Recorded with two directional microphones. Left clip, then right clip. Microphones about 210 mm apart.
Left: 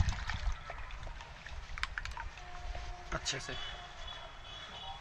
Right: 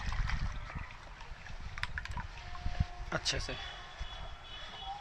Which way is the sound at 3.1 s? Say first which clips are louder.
Right 3 dB; 40° right (ahead or behind).